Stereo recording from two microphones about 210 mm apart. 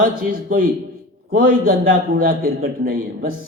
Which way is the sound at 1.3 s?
45° right (ahead or behind).